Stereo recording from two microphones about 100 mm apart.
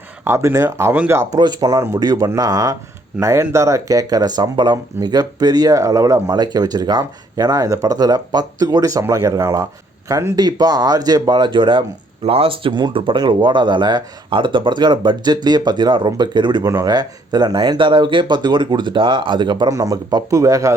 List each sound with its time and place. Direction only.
0.3 s speech: 30° right (ahead or behind)
0.9 s speech: 20° right (ahead or behind)
1.3 s speech: 40° right (ahead or behind)
10.3 s speech: 45° right (ahead or behind)
16.6 s speech: 35° right (ahead or behind)
19.7 s speech: 35° right (ahead or behind)